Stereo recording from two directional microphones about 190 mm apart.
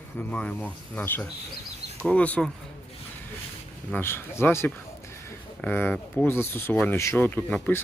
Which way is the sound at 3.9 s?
10° left (ahead or behind).